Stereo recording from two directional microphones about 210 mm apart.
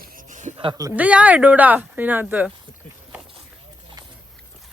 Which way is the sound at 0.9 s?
5° right (ahead or behind).